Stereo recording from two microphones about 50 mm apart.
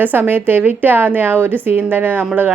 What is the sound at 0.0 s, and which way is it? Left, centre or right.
A woman's voice, right.